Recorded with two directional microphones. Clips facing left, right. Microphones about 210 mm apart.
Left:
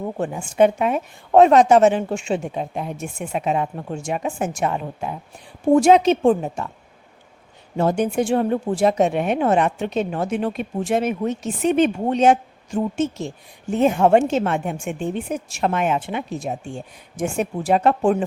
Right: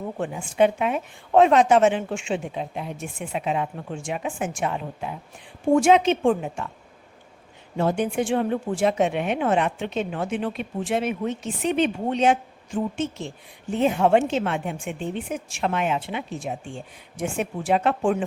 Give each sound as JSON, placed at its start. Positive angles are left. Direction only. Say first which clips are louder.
{"t": 0.2, "sound": "a woman's voice", "louder": "left 3 dB", "side_deg": 45}
{"t": 7.8, "sound": "a woman's voice", "louder": "left 3 dB", "side_deg": 40}